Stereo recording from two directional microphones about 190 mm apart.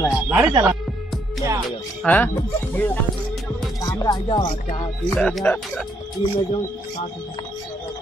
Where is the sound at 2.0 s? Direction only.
10° left (ahead or behind).